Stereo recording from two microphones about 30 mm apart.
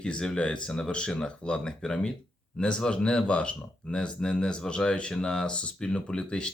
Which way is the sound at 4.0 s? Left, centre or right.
Left.